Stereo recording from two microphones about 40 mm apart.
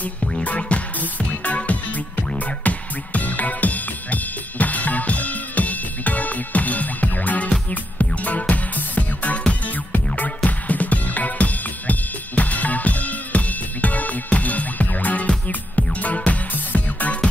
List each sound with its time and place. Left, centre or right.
0.6 s music: left